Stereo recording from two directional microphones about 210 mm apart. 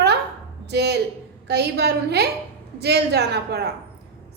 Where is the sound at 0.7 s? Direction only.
50° right (ahead or behind).